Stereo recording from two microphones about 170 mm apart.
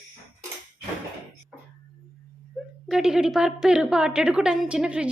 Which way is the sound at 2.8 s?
5° right (ahead or behind).